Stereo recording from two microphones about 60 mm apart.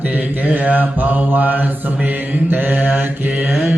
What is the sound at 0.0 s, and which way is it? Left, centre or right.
Mantra, right.